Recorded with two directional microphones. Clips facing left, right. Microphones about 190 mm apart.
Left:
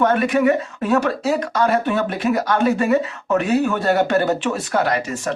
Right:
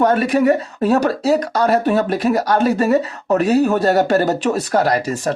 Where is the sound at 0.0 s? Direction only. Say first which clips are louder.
Right 2 dB; 35° right (ahead or behind).